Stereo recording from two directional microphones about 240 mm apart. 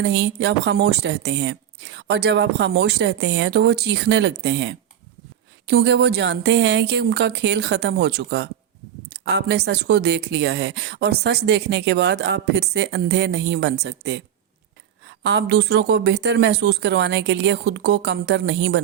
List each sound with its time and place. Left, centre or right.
0.0 s speech: right
15.2 s speech: right